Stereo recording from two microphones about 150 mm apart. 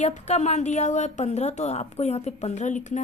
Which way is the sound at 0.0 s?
50° left (ahead or behind).